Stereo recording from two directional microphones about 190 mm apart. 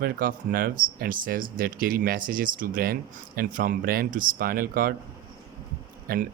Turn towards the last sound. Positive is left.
turn(degrees=-50)  # may be behind; listen again after turning